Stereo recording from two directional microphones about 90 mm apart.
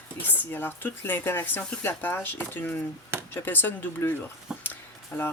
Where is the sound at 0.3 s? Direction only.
20° left (ahead or behind).